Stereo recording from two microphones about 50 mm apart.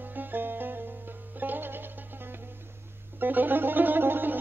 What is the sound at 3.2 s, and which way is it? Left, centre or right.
Music, right.